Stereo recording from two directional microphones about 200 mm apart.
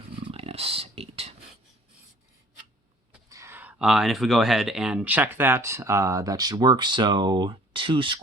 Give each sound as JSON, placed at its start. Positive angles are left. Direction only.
{"t": 0.2, "sound": "dog", "side_deg": -30}
{"t": 3.2, "sound": "speech", "side_deg": -15}